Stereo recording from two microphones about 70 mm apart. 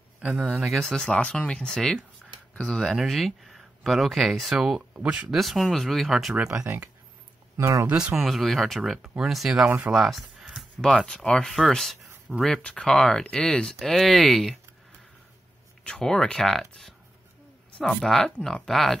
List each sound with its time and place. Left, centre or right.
0.2 s speech: centre
0.8 s speech: centre
2.5 s speech: centre
3.1 s speech: centre
4.9 s speech: centre
5.3 s speech: centre
7.5 s speech: right
7.8 s speech: centre
8.2 s speech: centre
9.8 s a sound: centre
10.9 s speech: centre
12.4 s speech: centre
13.7 s speech: centre
15.8 s speech: centre